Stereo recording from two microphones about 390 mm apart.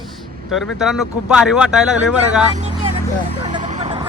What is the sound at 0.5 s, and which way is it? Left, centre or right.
Speech, centre.